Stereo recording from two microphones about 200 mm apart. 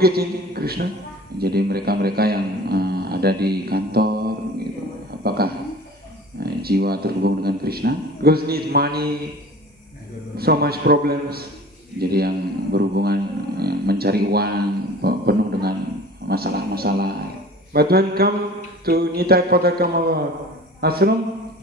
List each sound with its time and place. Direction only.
0.0 s a man's voice: 50° right (ahead or behind)
10.3 s a man's voice: 50° right (ahead or behind)